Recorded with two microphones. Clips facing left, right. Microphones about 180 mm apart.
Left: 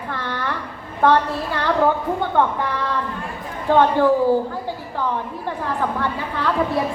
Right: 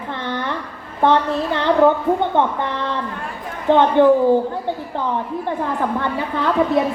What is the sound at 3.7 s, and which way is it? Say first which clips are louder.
Speech: right 1 dB; 20° right (ahead or behind).